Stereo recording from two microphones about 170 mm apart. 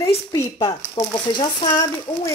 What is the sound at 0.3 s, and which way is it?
Speech, 20° left (ahead or behind).